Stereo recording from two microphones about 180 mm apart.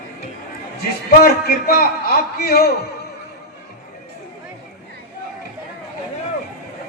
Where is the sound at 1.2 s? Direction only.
60° left (ahead or behind).